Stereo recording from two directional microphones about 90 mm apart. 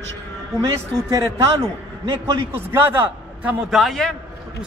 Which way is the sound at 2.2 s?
25° right (ahead or behind).